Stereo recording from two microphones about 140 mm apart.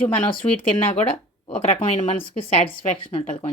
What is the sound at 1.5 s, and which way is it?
Speech, 45° left (ahead or behind).